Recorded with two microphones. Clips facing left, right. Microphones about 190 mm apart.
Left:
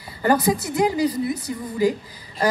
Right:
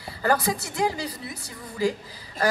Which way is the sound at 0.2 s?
20° left (ahead or behind).